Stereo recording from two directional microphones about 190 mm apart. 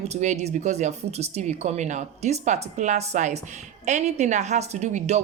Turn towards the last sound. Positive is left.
turn(degrees=-35)  # may be behind; listen again after turning